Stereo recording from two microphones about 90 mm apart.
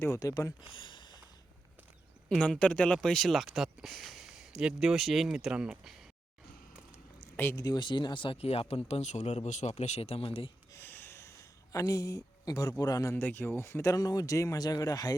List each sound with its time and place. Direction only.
0.0 s speech: 35° left (ahead or behind)
0.7 s a sound: 65° left (ahead or behind)
2.4 s speech: 10° left (ahead or behind); by 5.8 s 10° right (ahead or behind)
5.8 s a sound: centre (ahead or behind)
7.5 s speech: 40° left (ahead or behind)
7.8 s speech: 60° left (ahead or behind); by 10.5 s 90° left
10.8 s a sound: 25° left (ahead or behind); by 12.7 s 40° left (ahead or behind)
12.8 s speech: 45° left (ahead or behind)
13.1 s speech: 25° left (ahead or behind); by 15.1 s 40° left (ahead or behind)